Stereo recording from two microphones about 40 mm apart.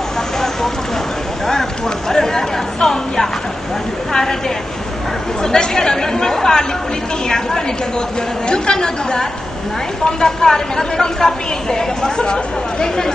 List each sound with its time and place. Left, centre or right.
1.5 s a woman's voice: centre
5.4 s a woman's voice: centre